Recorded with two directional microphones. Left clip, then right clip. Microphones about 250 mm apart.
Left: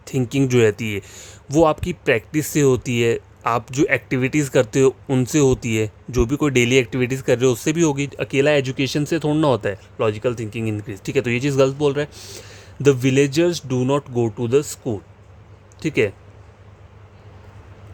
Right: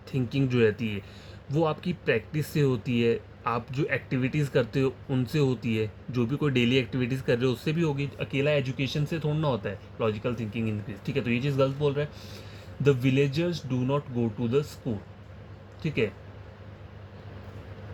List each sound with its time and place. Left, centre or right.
0.0 s speech: left